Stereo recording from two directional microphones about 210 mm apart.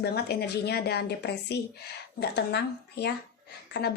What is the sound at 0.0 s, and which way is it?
A woman's voice, 50° left (ahead or behind).